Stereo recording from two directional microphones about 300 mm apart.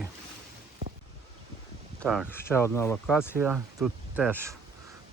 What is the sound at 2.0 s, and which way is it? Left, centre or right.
Speech, centre.